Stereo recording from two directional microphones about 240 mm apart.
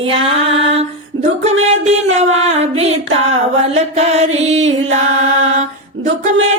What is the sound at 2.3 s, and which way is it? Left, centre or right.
Mantra, right.